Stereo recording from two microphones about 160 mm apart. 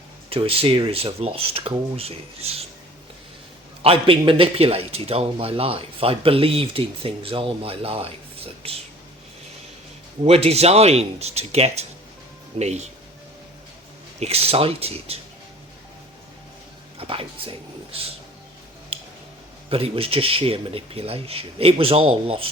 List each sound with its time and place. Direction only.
0.3 s a man's voice: 35° right (ahead or behind)
3.8 s a man's voice: 35° right (ahead or behind)
10.2 s a man's voice: 40° right (ahead or behind)
14.2 s a man's voice: 40° right (ahead or behind)
17.0 s a man's voice: 35° right (ahead or behind)
19.7 s a man's voice: 35° right (ahead or behind)